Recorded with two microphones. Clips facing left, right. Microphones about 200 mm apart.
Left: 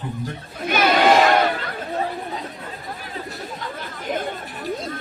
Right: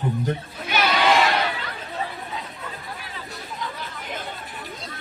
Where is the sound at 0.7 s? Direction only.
50° left (ahead or behind).